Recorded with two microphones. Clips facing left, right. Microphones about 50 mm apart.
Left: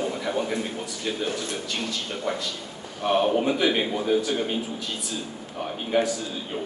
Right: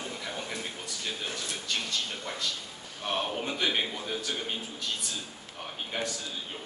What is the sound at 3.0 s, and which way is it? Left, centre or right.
A man's voice, centre.